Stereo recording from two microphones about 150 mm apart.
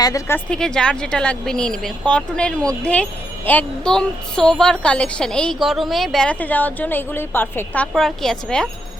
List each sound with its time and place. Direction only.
0.0 s speech: 20° left (ahead or behind)
0.3 s a woman's voice: 5° left (ahead or behind)